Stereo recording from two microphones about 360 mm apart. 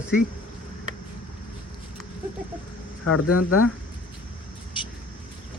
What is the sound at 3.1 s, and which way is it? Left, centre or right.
Speech, left.